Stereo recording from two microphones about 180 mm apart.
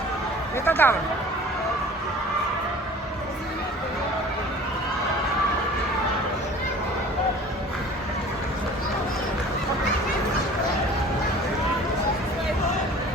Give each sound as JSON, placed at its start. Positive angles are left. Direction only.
{"t": 0.6, "sound": "speech", "side_deg": 10}